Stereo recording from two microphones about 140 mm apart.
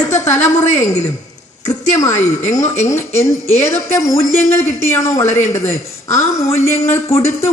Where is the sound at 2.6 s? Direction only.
60° left (ahead or behind).